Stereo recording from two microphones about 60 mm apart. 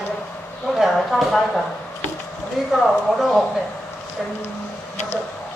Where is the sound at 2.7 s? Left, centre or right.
Centre.